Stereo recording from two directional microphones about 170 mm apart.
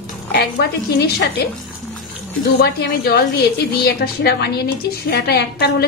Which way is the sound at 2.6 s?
70° left (ahead or behind).